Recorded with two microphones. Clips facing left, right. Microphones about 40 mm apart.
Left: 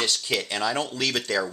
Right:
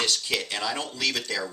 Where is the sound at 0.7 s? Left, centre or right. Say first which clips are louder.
Left 2 dB; centre.